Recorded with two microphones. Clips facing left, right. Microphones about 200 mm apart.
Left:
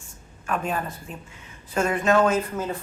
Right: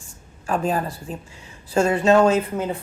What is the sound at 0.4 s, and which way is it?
A woman's voice, 30° right (ahead or behind).